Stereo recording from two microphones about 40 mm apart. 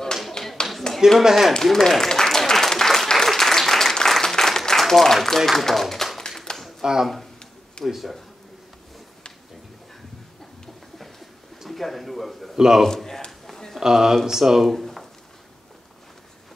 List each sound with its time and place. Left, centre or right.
0.4 s clapping: centre
0.9 s speech: centre
1.5 s applause: centre
5.1 s speech: centre
6.1 s a sound: centre
6.8 s speech: centre
11.6 s a man's voice: centre
12.5 s speech: centre
12.8 s a man's voice: centre
13.7 s speech: centre